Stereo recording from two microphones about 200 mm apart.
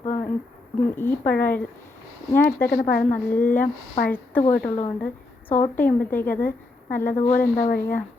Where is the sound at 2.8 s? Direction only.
40° left (ahead or behind).